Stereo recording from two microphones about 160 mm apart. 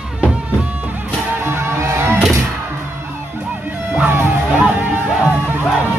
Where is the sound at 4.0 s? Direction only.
10° right (ahead or behind).